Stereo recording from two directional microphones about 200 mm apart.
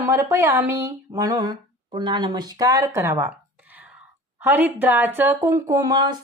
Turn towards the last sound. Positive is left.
turn(degrees=-20)  # may be behind; listen again after turning